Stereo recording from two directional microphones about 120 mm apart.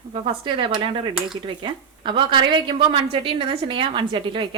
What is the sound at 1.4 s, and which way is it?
A woman's voice, 45° right (ahead or behind).